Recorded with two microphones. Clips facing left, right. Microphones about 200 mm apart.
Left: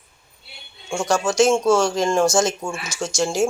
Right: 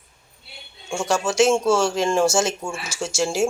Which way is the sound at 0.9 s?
5° right (ahead or behind).